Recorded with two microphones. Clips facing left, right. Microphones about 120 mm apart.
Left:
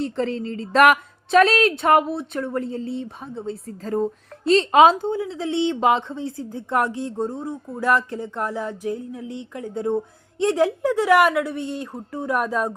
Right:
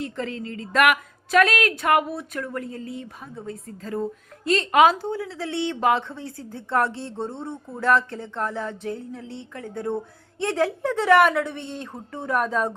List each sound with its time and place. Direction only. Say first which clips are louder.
0.0 s a woman's voice: left 6 dB; 35° left (ahead or behind)
3.8 s a woman's voice: left 5 dB; 35° left (ahead or behind)
4.4 s a sound: left 3 dB; 25° left (ahead or behind); by 12.7 s 5° left (ahead or behind)